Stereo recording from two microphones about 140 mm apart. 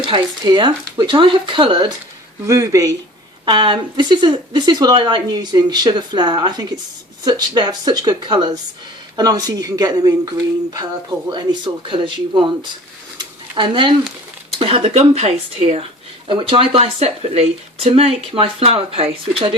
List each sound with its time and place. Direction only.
0.0 s speech: 35° right (ahead or behind)
2.5 s speech: 20° right (ahead or behind)
3.4 s speech: 35° right (ahead or behind)
13.1 s a sound: 35° right (ahead or behind)
14.6 s speech: 45° right (ahead or behind)
16.2 s speech: 40° right (ahead or behind)